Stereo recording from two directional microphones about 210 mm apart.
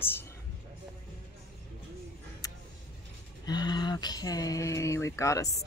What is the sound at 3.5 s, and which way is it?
Speech, 20° left (ahead or behind).